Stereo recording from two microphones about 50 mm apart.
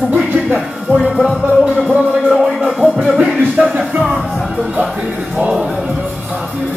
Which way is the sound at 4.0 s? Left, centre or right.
Centre.